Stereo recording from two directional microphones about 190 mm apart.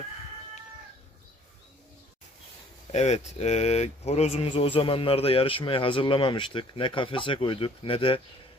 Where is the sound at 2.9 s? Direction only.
35° left (ahead or behind).